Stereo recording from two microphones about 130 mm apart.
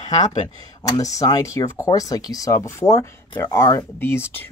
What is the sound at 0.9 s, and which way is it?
Speech, 30° left (ahead or behind).